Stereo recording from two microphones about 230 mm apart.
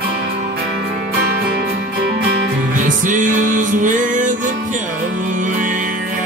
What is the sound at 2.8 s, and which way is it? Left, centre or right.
Music, right.